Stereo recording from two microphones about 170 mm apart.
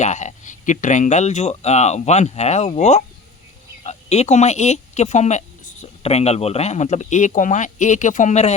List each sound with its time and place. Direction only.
0.0 s speech: 45° left (ahead or behind)